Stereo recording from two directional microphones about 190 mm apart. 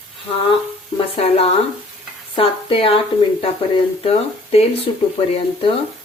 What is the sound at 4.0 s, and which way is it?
Speech, 30° left (ahead or behind).